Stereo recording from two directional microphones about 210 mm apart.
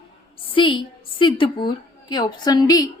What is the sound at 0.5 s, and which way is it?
A woman's voice, 25° left (ahead or behind).